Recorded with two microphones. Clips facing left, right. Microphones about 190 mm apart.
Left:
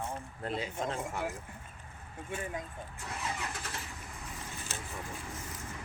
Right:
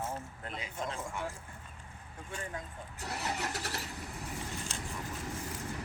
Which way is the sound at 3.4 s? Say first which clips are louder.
Right 3 dB; 75° right (ahead or behind).